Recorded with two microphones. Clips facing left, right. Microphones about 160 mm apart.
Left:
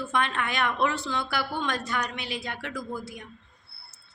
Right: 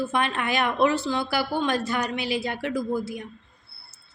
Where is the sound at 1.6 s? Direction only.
5° right (ahead or behind).